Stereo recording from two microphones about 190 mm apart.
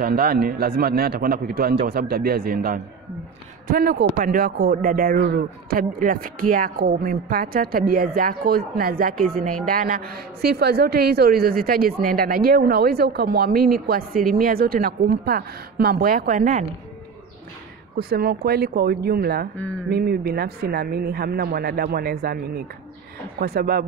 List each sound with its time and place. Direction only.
0.0 s speech: 55° right (ahead or behind)
17.9 s speech: 55° right (ahead or behind)
23.4 s speech: 55° right (ahead or behind)